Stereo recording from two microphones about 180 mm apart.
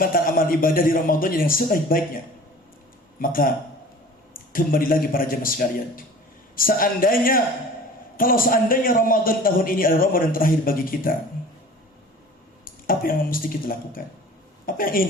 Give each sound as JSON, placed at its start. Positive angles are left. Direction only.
{"t": 0.0, "sound": "a man's voice", "side_deg": 55}
{"t": 3.2, "sound": "a man's voice", "side_deg": 55}
{"t": 12.6, "sound": "a man's voice", "side_deg": 50}